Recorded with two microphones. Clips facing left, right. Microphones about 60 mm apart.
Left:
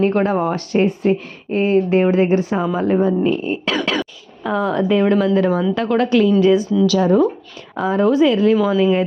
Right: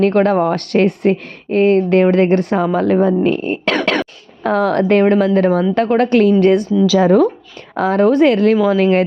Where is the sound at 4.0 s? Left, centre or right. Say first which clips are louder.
Right 5 dB; right.